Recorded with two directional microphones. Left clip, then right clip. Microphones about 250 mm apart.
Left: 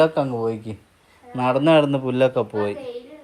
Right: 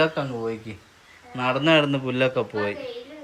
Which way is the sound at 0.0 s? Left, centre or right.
Left.